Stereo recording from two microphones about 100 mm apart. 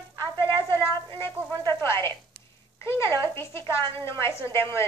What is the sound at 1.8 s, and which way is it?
A woman's voice, 25° left (ahead or behind).